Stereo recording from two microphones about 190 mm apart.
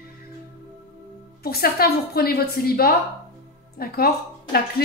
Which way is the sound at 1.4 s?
55° left (ahead or behind).